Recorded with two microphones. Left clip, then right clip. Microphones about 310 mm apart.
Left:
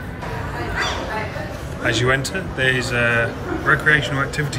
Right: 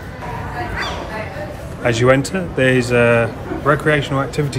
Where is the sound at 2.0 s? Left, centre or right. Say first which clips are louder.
Right 5 dB; centre.